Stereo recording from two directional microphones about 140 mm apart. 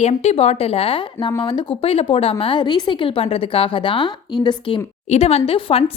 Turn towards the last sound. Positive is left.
turn(degrees=40)  # may be behind; listen again after turning